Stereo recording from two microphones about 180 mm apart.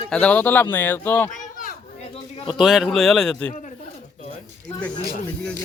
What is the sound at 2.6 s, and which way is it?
Speech, centre (ahead or behind).